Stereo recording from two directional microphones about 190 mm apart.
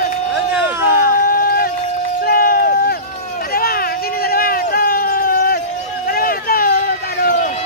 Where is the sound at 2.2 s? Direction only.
50° left (ahead or behind).